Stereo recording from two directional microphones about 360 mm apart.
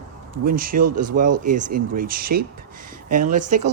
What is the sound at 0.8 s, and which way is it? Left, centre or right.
Speech, right.